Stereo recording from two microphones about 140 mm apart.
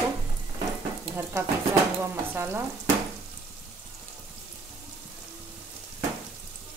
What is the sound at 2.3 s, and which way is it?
Stir, 20° right (ahead or behind).